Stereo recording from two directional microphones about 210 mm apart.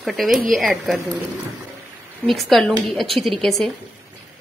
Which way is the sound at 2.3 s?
Centre (ahead or behind).